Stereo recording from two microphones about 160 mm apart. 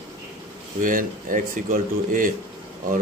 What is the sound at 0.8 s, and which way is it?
Speech, 55° right (ahead or behind).